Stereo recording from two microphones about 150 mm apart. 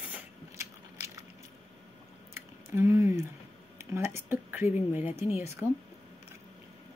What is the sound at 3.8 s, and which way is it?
Speech, 15° right (ahead or behind).